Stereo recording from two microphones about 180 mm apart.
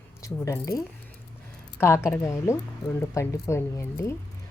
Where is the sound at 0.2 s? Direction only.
15° left (ahead or behind).